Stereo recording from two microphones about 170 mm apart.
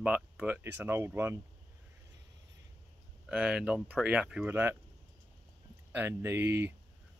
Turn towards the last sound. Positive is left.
turn(degrees=-15)  # may be behind; listen again after turning